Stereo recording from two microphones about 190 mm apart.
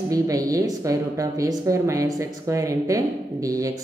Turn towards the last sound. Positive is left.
turn(degrees=-20)  # may be behind; listen again after turning